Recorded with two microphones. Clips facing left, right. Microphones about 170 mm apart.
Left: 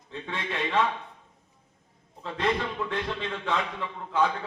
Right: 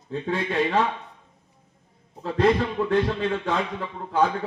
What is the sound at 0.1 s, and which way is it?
Speech, 40° right (ahead or behind).